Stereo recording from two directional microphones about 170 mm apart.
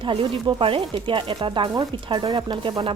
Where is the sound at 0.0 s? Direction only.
30° right (ahead or behind).